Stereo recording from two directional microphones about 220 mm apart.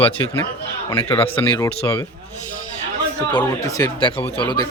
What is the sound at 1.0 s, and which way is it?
Speech, 25° left (ahead or behind).